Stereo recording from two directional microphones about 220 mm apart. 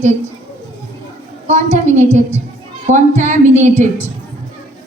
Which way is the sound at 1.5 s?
30° right (ahead or behind).